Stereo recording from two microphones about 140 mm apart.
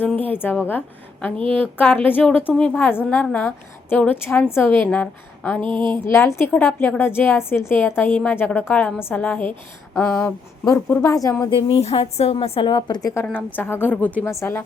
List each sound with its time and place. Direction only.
0.0 s a woman's voice: 10° left (ahead or behind)
1.5 s a woman's voice: 10° left (ahead or behind)
5.6 s a sound: 35° right (ahead or behind)
6.1 s a woman's voice: 20° left (ahead or behind)
9.9 s a sound: 5° left (ahead or behind)
10.7 s a woman's voice: 25° left (ahead or behind)
11.7 s a woman's voice: 45° left (ahead or behind); by 13.2 s 25° left (ahead or behind)
13.2 s a woman's voice: 15° left (ahead or behind)